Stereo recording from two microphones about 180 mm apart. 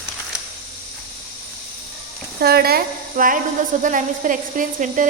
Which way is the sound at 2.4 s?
60° right (ahead or behind).